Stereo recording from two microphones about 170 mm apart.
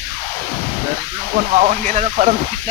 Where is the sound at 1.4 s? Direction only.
50° right (ahead or behind).